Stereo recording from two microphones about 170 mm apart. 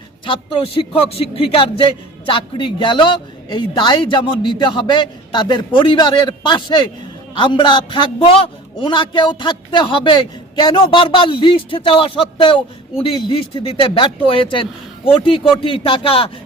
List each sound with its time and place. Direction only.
0.3 s a man's voice: 30° left (ahead or behind)